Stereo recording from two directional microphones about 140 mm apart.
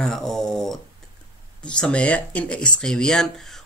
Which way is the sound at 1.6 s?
5° left (ahead or behind).